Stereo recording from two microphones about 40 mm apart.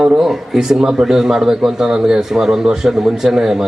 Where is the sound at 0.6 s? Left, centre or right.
Centre.